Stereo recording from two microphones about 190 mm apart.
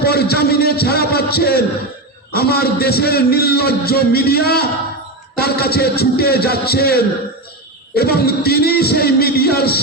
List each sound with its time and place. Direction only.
0.0 s music: 55° left (ahead or behind)
2.3 s a man's voice: 55° left (ahead or behind)